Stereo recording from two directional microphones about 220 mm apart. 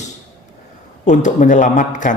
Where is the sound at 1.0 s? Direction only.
35° left (ahead or behind).